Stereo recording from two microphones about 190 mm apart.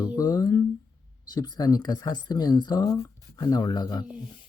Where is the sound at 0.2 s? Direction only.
20° left (ahead or behind).